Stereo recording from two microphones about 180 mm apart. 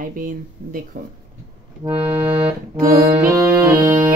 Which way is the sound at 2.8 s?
55° right (ahead or behind).